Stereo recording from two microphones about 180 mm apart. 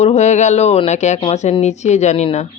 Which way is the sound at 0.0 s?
40° left (ahead or behind).